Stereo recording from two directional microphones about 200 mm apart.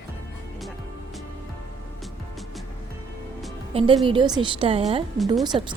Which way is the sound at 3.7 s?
30° right (ahead or behind).